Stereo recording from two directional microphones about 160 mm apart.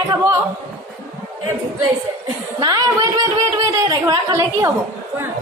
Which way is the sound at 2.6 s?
25° right (ahead or behind).